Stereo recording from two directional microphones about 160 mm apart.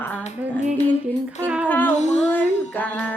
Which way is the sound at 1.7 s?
10° left (ahead or behind).